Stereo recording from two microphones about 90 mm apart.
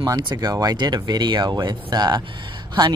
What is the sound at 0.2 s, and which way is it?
Speech, 55° right (ahead or behind).